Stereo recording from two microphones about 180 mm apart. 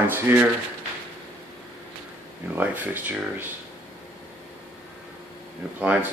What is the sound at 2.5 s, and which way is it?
Speech, 10° right (ahead or behind).